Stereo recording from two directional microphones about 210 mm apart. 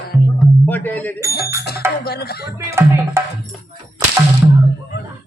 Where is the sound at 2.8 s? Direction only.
10° right (ahead or behind).